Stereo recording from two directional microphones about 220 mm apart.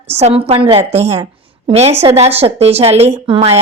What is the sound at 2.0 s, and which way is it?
A woman's voice, 30° right (ahead or behind).